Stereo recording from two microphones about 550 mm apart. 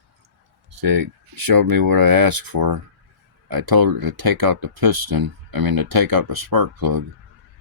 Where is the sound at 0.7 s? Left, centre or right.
Right.